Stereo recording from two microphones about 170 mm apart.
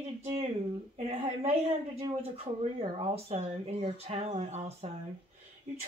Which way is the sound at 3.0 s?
35° right (ahead or behind).